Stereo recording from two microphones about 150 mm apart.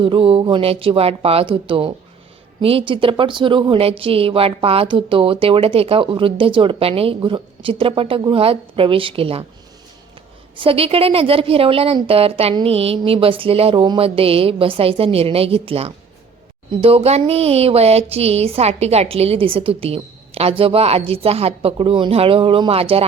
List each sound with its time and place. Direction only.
0.0 s speech: 35° right (ahead or behind)
10.6 s speech: 40° right (ahead or behind)